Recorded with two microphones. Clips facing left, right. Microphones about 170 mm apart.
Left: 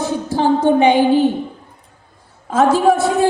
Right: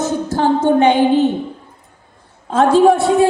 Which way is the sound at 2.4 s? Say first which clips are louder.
Right 2 dB; 5° left (ahead or behind).